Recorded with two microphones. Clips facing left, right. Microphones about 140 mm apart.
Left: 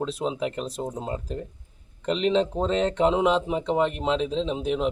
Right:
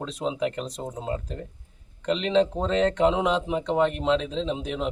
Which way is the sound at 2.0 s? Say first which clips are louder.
Even; 5° left (ahead or behind).